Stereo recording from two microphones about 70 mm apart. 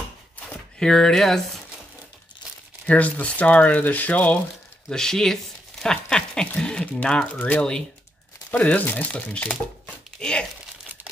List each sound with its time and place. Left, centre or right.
0.7 s speech: centre
2.9 s speech: centre
4.8 s speech: centre
10.1 s speech: centre